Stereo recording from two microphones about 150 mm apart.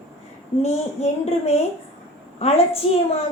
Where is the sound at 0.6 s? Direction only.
45° left (ahead or behind).